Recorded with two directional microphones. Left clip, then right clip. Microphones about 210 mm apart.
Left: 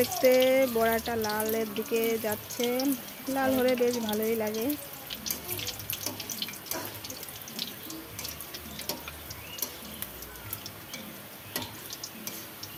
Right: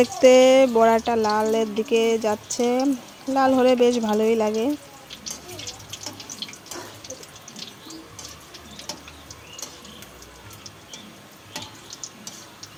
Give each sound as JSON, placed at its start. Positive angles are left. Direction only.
{"t": 0.0, "sound": "speech", "side_deg": -35}